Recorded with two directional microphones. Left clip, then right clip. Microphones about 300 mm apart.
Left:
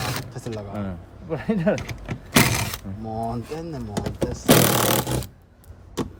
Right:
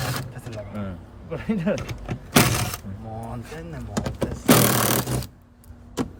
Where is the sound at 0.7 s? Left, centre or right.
Left.